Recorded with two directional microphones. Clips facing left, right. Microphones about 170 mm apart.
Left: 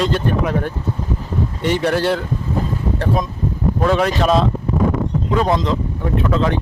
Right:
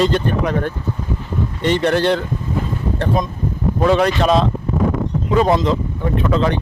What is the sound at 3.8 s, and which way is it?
Speech, centre (ahead or behind).